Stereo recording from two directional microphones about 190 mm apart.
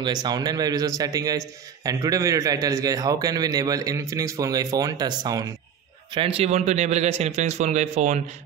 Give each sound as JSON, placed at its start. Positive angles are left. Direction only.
{"t": 0.0, "sound": "a man's voice", "side_deg": -20}
{"t": 6.1, "sound": "a man's voice", "side_deg": -30}